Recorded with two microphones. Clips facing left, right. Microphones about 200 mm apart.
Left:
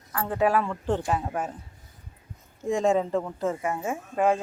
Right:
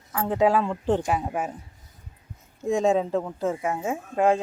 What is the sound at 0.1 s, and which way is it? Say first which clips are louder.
Speech: right 3 dB; 15° right (ahead or behind).